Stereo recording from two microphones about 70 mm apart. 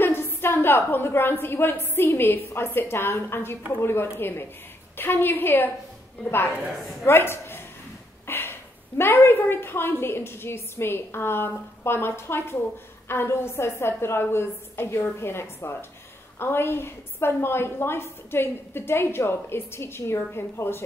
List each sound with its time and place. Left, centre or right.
0.0 s a woman's voice: left
6.6 s a woman's voice: centre
7.1 s a woman's voice: left